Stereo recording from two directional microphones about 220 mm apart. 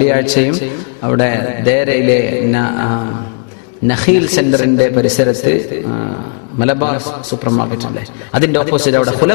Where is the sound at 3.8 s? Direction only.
40° right (ahead or behind).